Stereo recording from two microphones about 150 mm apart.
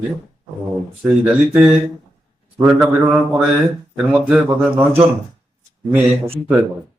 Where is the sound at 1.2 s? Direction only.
5° right (ahead or behind).